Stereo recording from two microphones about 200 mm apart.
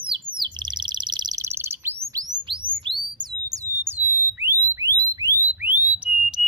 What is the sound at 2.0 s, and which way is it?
Chirp tone, 15° right (ahead or behind).